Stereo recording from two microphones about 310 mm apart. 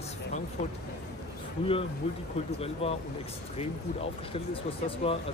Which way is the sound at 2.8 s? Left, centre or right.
Centre.